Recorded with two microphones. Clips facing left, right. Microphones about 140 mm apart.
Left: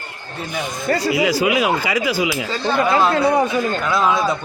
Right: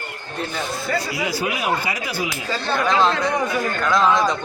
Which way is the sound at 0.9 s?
50° left (ahead or behind).